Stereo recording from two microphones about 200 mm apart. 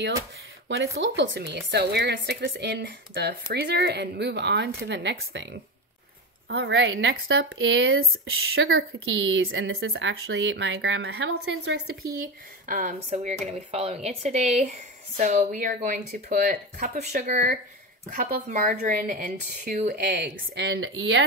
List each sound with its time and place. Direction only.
0.7 s a woman's voice: 65° right (ahead or behind)
12.6 s speech: 40° right (ahead or behind)